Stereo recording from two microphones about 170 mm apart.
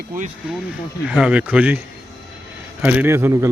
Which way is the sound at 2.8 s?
10° right (ahead or behind).